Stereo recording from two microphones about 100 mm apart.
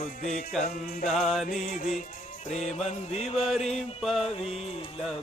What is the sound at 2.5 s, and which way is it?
Music, 90° left.